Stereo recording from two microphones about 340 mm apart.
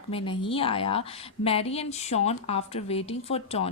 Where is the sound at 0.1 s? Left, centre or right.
Centre.